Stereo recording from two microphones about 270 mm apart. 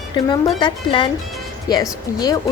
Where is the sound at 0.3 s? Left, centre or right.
Centre.